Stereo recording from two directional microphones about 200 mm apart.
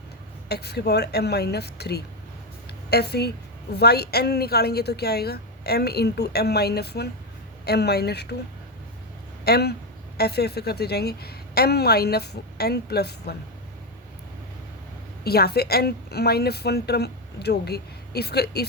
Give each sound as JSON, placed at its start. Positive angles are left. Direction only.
{"t": 0.4, "sound": "a woman's voice", "side_deg": 55}
{"t": 9.4, "sound": "a woman's voice", "side_deg": 55}
{"t": 15.2, "sound": "a woman's voice", "side_deg": 50}